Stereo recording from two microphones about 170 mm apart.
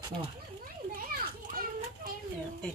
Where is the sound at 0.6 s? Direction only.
60° right (ahead or behind).